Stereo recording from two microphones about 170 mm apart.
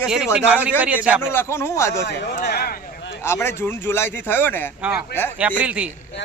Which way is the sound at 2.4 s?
65° left (ahead or behind).